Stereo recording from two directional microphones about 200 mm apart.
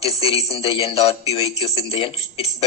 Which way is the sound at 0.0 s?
30° left (ahead or behind).